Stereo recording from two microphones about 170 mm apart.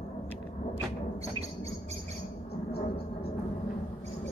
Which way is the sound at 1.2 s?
35° right (ahead or behind).